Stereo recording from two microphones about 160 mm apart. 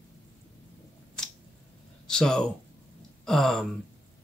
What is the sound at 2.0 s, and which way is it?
Speech, 5° left (ahead or behind).